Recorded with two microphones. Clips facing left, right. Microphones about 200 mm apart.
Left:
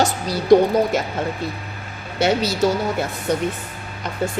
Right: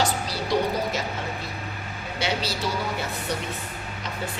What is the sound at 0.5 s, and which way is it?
Speech, 50° left (ahead or behind).